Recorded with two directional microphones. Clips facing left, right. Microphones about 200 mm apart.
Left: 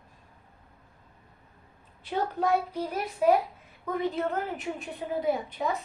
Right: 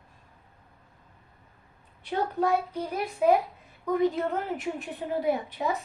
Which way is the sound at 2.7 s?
5° left (ahead or behind).